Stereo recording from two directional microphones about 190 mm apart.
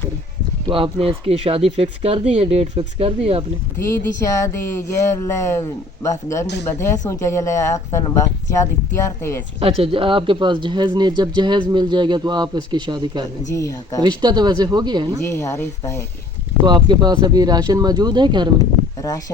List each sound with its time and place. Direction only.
0.7 s speech: 30° right (ahead or behind)
3.8 s speech: 15° left (ahead or behind)
9.6 s speech: 30° right (ahead or behind)
13.5 s speech: 15° left (ahead or behind)
14.0 s speech: 20° right (ahead or behind)
15.2 s speech: 15° left (ahead or behind)
16.6 s speech: 25° right (ahead or behind)